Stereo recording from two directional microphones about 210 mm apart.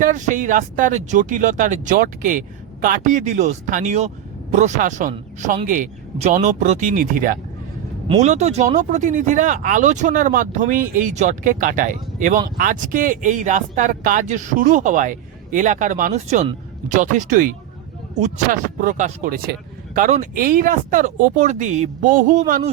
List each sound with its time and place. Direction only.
0.0 s speech: 40° right (ahead or behind)